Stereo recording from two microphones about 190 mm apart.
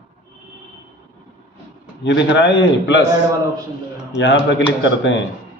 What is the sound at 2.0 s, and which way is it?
Speech, 70° left (ahead or behind).